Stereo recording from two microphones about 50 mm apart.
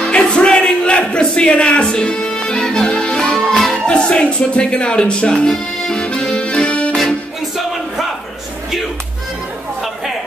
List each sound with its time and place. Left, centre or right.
0.0 s music: left
3.7 s speech: centre